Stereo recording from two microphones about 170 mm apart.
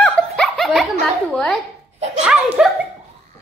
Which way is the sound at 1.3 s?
Centre (ahead or behind).